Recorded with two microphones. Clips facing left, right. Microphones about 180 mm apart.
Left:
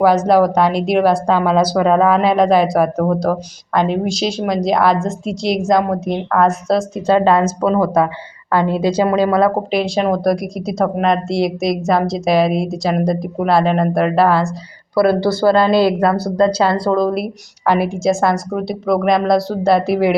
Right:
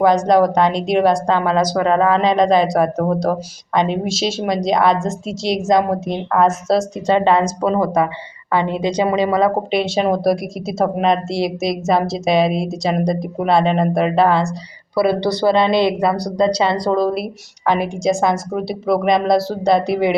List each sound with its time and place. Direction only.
0.0 s speech: 5° left (ahead or behind)